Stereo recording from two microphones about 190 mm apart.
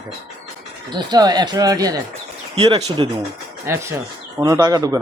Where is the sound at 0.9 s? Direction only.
20° right (ahead or behind).